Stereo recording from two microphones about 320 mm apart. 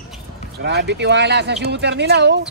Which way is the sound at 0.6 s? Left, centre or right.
Right.